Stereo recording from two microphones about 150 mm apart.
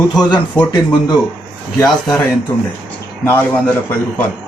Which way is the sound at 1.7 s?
20° left (ahead or behind).